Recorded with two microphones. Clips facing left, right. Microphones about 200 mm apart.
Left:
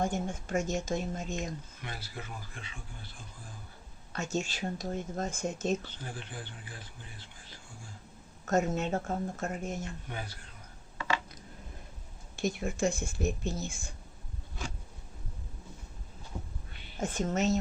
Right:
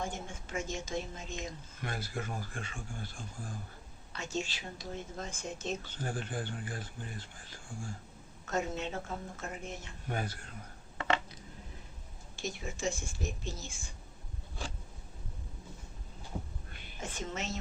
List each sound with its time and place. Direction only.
0.0 s speech: 45° left (ahead or behind)
1.8 s speech: 50° right (ahead or behind)
4.1 s speech: 45° left (ahead or behind)
6.0 s speech: 45° right (ahead or behind)
8.4 s speech: 45° left (ahead or behind)
10.1 s speech: 50° right (ahead or behind)
12.4 s speech: 55° left (ahead or behind)
17.0 s speech: 45° left (ahead or behind)